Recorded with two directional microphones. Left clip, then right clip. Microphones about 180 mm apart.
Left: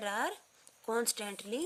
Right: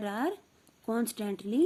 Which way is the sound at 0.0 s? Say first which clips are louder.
Right 2 dB; 30° left (ahead or behind).